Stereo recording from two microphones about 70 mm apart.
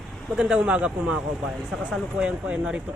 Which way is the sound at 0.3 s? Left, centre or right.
Centre.